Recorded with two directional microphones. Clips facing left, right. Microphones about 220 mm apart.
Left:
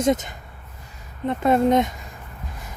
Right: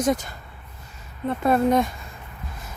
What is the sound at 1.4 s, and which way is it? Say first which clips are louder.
Speech: left 2 dB; 20° left (ahead or behind).